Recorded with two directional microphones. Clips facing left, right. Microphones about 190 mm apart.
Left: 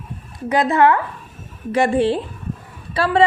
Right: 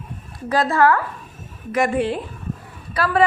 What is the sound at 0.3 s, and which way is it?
A woman's voice, 20° left (ahead or behind).